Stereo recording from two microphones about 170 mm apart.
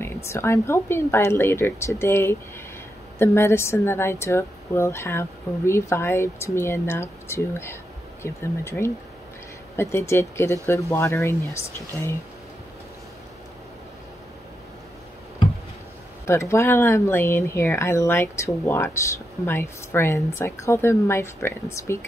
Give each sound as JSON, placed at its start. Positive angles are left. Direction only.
{"t": 0.0, "sound": "speech", "side_deg": 15}
{"t": 16.3, "sound": "speech", "side_deg": 15}